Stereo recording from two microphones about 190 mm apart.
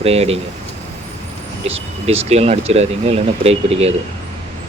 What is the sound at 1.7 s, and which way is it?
Speech, 30° right (ahead or behind).